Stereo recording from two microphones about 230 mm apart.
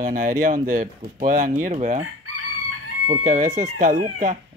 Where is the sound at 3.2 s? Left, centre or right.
Right.